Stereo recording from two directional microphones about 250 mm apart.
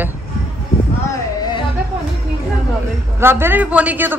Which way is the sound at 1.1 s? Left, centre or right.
Centre.